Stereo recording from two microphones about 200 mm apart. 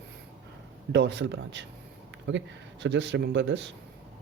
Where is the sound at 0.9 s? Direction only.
60° right (ahead or behind).